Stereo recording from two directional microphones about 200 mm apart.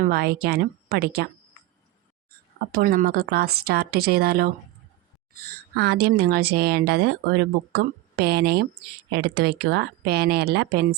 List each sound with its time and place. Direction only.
0.0 s speech: 50° right (ahead or behind)
2.7 s speech: 45° right (ahead or behind)
5.7 s speech: 55° right (ahead or behind)